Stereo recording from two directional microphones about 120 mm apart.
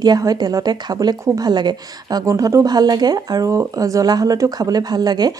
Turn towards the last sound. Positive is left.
turn(degrees=-35)  # may be behind; listen again after turning